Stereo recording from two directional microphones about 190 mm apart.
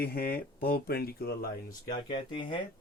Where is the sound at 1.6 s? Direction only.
25° left (ahead or behind).